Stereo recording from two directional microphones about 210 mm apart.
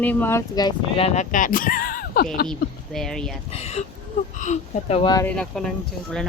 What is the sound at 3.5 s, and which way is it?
Speech, 30° left (ahead or behind).